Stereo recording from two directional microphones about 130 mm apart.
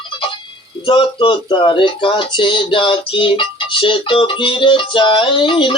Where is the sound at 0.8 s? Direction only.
40° left (ahead or behind).